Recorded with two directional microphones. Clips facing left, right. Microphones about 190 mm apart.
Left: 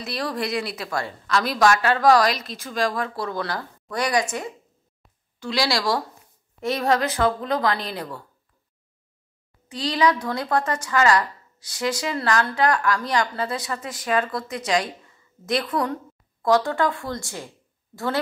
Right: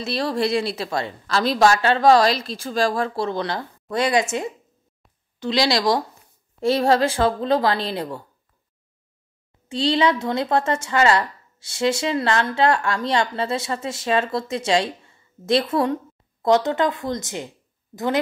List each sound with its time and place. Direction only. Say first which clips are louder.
0.0 s speech: right 5 dB; 25° right (ahead or behind)
6.6 s speech: right 4 dB; 30° right (ahead or behind)
9.7 s a woman's voice: right 2 dB; 25° right (ahead or behind)